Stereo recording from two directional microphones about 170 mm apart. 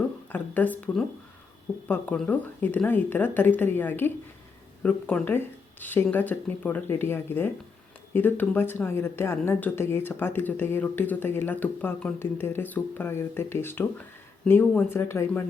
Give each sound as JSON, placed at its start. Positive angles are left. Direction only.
{"t": 0.3, "sound": "a woman's voice", "side_deg": 10}